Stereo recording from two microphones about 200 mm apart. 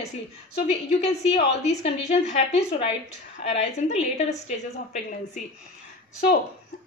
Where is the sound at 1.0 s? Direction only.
30° left (ahead or behind).